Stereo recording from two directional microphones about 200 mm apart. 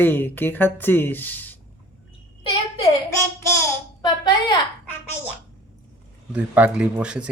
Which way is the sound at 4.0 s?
20° left (ahead or behind).